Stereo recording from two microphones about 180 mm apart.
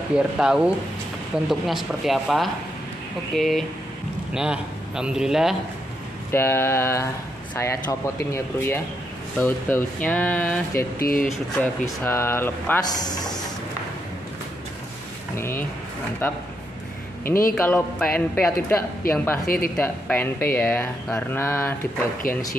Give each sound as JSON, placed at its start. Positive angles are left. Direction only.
{"t": 0.1, "sound": "a man's voice", "side_deg": -5}
{"t": 6.3, "sound": "speech", "side_deg": 15}
{"t": 11.0, "sound": "speech", "side_deg": 55}
{"t": 11.2, "sound": "speech", "side_deg": 10}
{"t": 15.3, "sound": "speech", "side_deg": 15}
{"t": 17.2, "sound": "speech", "side_deg": 50}
{"t": 17.6, "sound": "speech", "side_deg": 10}
{"t": 19.4, "sound": "speech", "side_deg": 55}
{"t": 19.8, "sound": "speech", "side_deg": 10}